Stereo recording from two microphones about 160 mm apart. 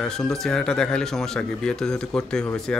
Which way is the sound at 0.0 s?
5° left (ahead or behind).